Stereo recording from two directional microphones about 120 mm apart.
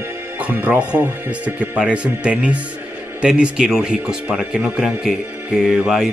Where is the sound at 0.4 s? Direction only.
15° right (ahead or behind).